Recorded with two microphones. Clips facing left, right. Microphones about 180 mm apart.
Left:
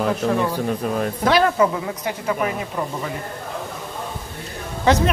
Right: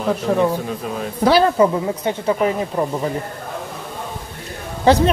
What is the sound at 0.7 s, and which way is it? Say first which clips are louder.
Speech: left 3 dB; 50° left (ahead or behind).